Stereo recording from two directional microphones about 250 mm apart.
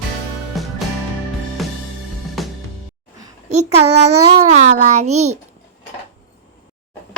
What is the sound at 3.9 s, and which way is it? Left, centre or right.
A child's voice, right.